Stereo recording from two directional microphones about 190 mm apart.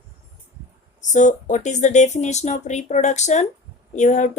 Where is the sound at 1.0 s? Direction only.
40° left (ahead or behind).